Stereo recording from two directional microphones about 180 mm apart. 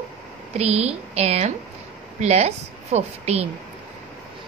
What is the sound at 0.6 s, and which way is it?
A woman's voice, 35° right (ahead or behind).